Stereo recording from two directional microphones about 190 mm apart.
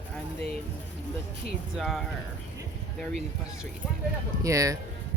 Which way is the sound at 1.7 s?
Centre (ahead or behind).